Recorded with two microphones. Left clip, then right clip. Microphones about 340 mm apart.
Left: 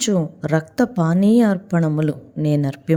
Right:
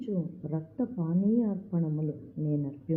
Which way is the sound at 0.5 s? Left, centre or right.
Left.